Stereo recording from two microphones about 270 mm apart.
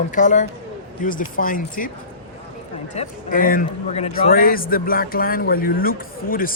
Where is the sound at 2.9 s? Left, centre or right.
Left.